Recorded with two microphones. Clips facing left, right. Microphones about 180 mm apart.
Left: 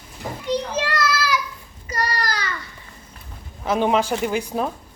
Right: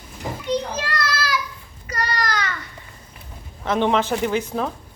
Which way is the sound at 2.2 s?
35° left (ahead or behind).